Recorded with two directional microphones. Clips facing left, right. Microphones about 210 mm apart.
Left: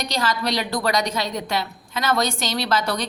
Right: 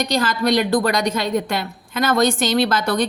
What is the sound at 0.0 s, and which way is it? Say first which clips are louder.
A woman's voice: right 5 dB; 50° right (ahead or behind).